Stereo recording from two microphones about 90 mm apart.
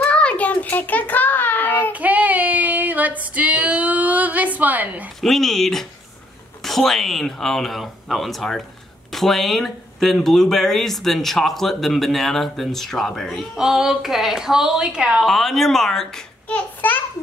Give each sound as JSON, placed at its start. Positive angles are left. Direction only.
{"t": 0.0, "sound": "child singing", "side_deg": 15}
{"t": 1.9, "sound": "female singing", "side_deg": -15}
{"t": 5.2, "sound": "speech", "side_deg": 5}
{"t": 15.2, "sound": "speech", "side_deg": 0}
{"t": 16.5, "sound": "a child's voice", "side_deg": 20}